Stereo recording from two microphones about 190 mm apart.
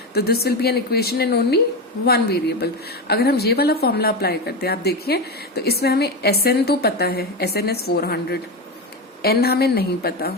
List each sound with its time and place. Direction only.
0.1 s speech: 55° left (ahead or behind)